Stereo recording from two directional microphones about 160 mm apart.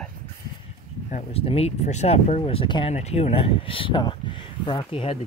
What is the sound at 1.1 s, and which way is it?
Speech, 45° left (ahead or behind).